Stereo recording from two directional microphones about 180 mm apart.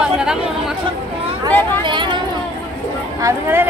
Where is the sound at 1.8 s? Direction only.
25° right (ahead or behind).